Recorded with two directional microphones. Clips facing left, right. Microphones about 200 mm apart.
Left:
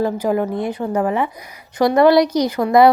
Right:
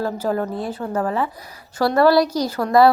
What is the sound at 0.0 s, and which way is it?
A woman's voice, 15° left (ahead or behind).